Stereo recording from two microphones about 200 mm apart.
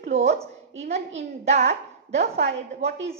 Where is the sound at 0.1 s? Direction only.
35° right (ahead or behind).